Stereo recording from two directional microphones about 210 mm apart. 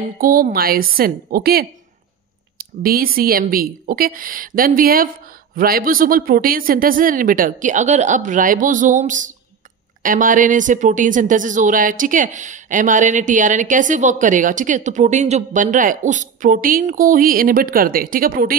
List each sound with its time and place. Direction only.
0.2 s a woman's voice: 45° right (ahead or behind)
2.8 s speech: 45° right (ahead or behind)